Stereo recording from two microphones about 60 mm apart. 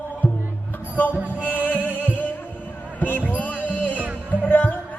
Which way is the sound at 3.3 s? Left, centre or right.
Left.